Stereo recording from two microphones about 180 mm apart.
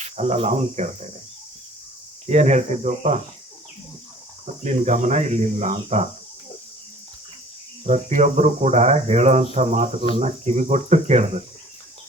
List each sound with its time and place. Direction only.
0.0 s speech: 40° right (ahead or behind)
2.3 s speech: 40° right (ahead or behind)
4.6 s speech: 40° right (ahead or behind)
7.9 s speech: 40° right (ahead or behind)